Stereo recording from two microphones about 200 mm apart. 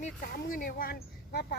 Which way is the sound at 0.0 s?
45° left (ahead or behind).